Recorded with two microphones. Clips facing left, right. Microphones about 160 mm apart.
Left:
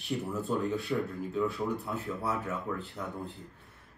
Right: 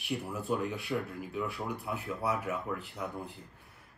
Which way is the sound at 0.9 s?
Centre (ahead or behind).